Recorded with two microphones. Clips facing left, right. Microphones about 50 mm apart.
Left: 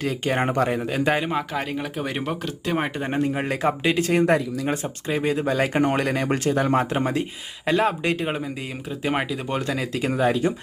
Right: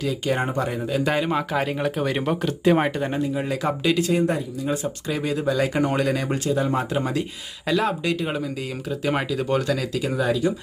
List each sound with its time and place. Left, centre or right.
0.0 s speech: left
1.0 s speech: centre
1.3 s speech: centre
3.2 s speech: left
4.1 s speech: left
4.6 s speech: left
8.9 s speech: left